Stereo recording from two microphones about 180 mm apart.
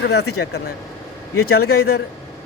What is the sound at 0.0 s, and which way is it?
Speech, 65° left (ahead or behind).